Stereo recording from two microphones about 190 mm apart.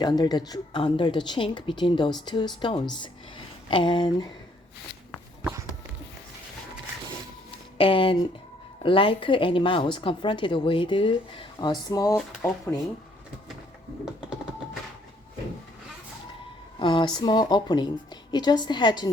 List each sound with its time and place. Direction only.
0.0 s a woman's voice: 20° left (ahead or behind)
5.4 s a sound: 10° right (ahead or behind)
7.8 s a woman's voice: 25° left (ahead or behind)
16.8 s a woman's voice: 25° left (ahead or behind)